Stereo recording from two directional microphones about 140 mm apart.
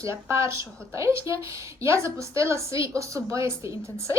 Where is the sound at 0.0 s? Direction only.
20° right (ahead or behind).